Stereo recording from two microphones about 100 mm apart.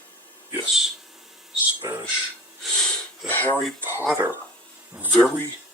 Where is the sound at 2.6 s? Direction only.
5° left (ahead or behind).